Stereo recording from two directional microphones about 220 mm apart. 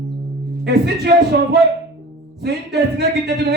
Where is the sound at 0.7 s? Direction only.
45° right (ahead or behind).